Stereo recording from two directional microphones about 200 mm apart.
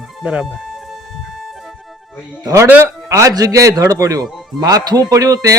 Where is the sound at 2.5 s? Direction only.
10° right (ahead or behind).